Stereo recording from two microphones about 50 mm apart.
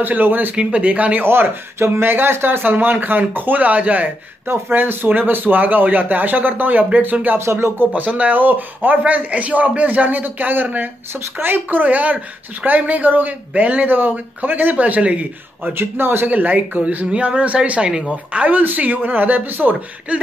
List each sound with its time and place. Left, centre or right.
0.0 s a man's voice: right
0.6 s speech: right
1.2 s speech: right
4.5 s a man's voice: right
7.3 s music: right
7.8 s a man's voice: right
15.6 s speech: right
16.3 s a man's voice: right